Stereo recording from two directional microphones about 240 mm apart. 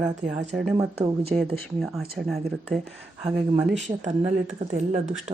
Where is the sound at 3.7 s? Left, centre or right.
Right.